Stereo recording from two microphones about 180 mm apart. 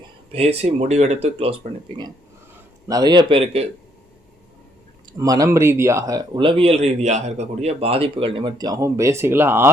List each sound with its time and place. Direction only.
0.3 s speech: 35° right (ahead or behind)
5.1 s speech: 20° right (ahead or behind)